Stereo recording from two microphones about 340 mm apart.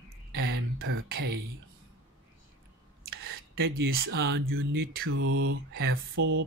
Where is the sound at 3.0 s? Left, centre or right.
Right.